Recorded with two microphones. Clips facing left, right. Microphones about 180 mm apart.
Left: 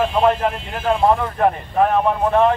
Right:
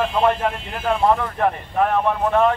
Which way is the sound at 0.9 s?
20° left (ahead or behind).